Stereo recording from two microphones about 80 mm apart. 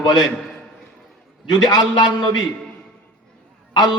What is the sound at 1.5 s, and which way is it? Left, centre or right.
Speech, left.